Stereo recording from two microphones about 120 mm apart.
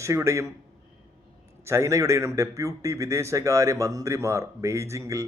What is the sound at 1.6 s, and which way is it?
A man's voice, 25° right (ahead or behind).